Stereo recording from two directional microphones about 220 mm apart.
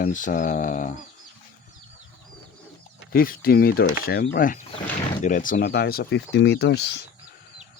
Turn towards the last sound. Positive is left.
turn(degrees=50)  # may be behind; listen again after turning